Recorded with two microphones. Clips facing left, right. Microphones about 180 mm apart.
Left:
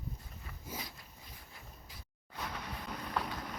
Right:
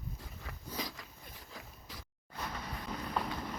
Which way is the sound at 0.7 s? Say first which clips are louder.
Right 5 dB; 90° right.